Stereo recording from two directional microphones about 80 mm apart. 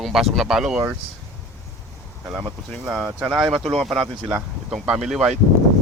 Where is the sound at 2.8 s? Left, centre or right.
Centre.